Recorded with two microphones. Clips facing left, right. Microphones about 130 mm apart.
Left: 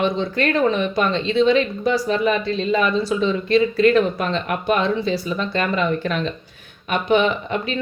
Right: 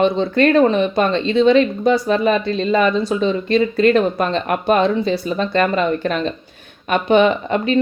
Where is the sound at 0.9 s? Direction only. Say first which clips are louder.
Right 3 dB; 50° right (ahead or behind).